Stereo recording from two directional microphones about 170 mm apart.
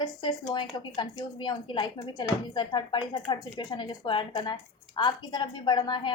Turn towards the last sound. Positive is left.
turn(degrees=25)  # may be behind; listen again after turning